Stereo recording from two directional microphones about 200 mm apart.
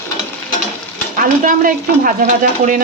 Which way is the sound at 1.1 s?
45° right (ahead or behind).